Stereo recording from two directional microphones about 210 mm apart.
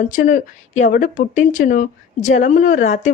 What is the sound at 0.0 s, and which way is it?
Speech, 40° left (ahead or behind).